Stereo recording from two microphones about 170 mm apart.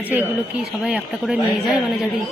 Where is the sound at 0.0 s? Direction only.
10° right (ahead or behind).